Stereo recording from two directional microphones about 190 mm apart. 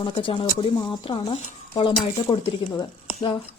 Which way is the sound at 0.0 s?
25° left (ahead or behind).